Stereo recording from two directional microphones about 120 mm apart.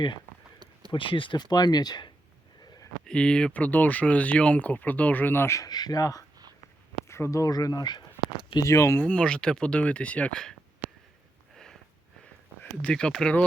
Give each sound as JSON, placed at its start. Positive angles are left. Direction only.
{"t": 0.9, "sound": "speech", "side_deg": 45}
{"t": 3.1, "sound": "speech", "side_deg": 5}
{"t": 8.6, "sound": "speech", "side_deg": 25}
{"t": 11.5, "sound": "a sound", "side_deg": 5}
{"t": 12.8, "sound": "speech", "side_deg": 5}